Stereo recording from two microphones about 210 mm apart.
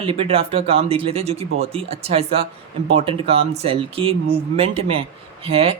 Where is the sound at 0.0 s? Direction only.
25° right (ahead or behind).